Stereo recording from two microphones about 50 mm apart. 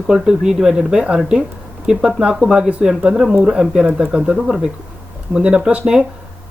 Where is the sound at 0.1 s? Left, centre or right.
Centre.